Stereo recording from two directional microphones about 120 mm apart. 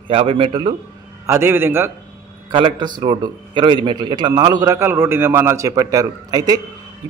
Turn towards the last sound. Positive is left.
turn(degrees=-35)  # may be behind; listen again after turning